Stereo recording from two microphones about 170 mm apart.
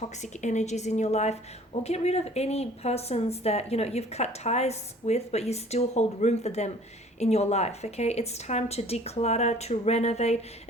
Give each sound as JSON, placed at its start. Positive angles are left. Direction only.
{"t": 0.2, "sound": "a woman's voice", "side_deg": 45}